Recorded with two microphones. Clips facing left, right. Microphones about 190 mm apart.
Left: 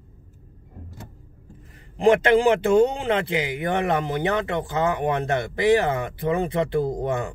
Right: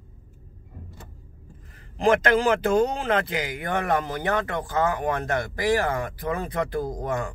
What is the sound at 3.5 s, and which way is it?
Speech, 25° left (ahead or behind).